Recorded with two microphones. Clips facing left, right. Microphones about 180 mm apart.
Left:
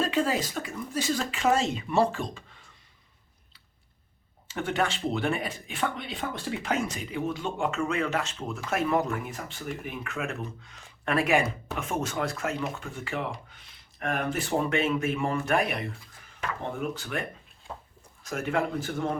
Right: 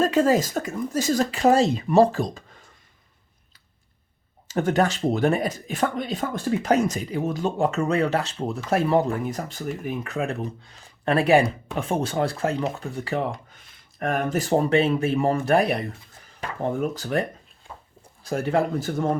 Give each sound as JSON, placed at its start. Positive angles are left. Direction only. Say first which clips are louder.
{"t": 0.0, "sound": "speech", "louder": "right 7 dB", "side_deg": -45}
{"t": 4.4, "sound": "speech", "louder": "right 7 dB", "side_deg": -40}